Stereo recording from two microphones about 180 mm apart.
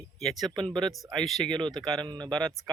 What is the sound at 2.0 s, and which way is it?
Speech, 25° right (ahead or behind).